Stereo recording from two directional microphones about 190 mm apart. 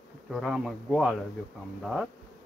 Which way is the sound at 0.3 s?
Centre (ahead or behind).